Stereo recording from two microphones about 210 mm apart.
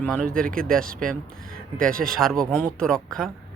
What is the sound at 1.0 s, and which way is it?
Speech, 5° left (ahead or behind).